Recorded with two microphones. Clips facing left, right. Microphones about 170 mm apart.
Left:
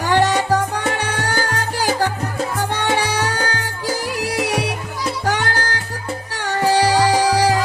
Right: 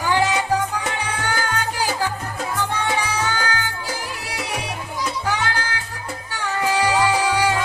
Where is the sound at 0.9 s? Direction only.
75° left (ahead or behind).